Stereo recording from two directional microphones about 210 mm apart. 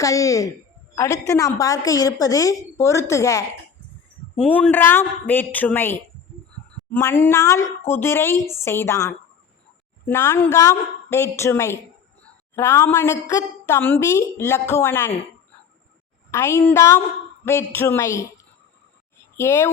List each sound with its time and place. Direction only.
0.0 s a woman's voice: 15° left (ahead or behind)
16.3 s a woman's voice: 10° left (ahead or behind)
19.4 s a woman's voice: 10° left (ahead or behind)